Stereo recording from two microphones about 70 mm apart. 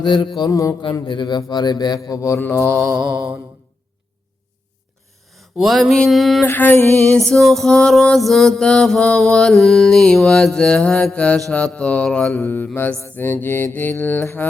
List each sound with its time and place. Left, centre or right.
0.0 s mantra: left
0.5 s mantra: left
1.5 s a man's voice: left
2.4 s mantra: left
2.8 s mantra: centre
5.3 s a sound: centre
6.1 s music: centre
6.4 s mantra: left
7.3 s music: centre
8.6 s mantra: centre
12.4 s mantra: left